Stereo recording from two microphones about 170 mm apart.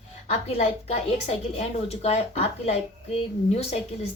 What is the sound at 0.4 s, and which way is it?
Speech, 40° left (ahead or behind).